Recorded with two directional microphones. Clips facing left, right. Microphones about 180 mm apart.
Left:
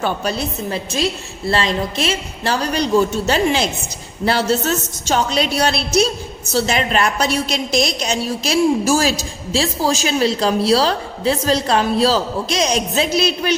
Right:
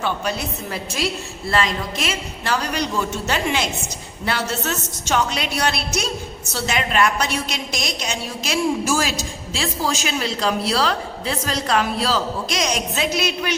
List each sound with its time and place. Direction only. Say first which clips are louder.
0.0 s a woman's voice: left 3 dB; 35° left (ahead or behind)